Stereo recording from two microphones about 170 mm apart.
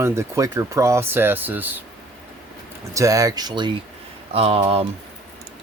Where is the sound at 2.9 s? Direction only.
20° right (ahead or behind); by 4.8 s 35° right (ahead or behind).